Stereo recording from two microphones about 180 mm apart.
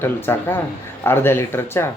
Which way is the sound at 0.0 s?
10° left (ahead or behind).